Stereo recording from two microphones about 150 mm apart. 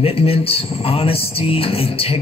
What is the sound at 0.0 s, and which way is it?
A man's voice, 40° left (ahead or behind).